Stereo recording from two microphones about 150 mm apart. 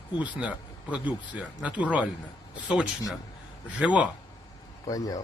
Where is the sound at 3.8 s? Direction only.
10° right (ahead or behind).